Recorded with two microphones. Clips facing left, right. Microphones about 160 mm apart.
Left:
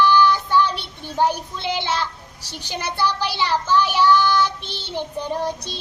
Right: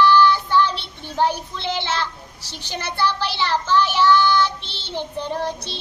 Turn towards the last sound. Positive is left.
turn(degrees=10)  # may be behind; listen again after turning